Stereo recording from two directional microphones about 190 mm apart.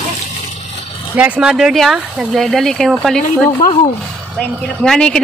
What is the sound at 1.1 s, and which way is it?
Speech, 10° right (ahead or behind).